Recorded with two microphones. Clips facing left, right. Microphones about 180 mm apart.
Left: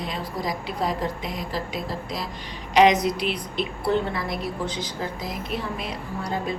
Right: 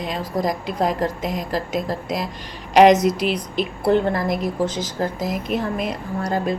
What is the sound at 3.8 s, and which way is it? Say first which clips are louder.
A woman's voice: right 7 dB; 45° right (ahead or behind).